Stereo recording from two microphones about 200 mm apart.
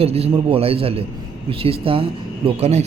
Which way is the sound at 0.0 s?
30° right (ahead or behind).